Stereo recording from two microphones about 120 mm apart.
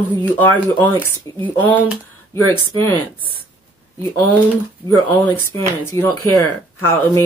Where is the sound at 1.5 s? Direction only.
15° right (ahead or behind).